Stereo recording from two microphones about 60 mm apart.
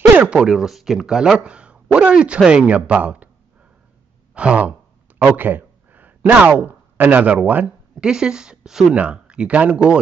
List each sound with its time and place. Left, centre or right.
0.3 s speech: centre
4.3 s speech: centre
5.2 s speech: right
8.0 s speech: centre
8.9 s speech: right